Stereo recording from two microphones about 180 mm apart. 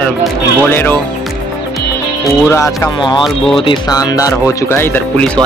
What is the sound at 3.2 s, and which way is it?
Speech, centre (ahead or behind).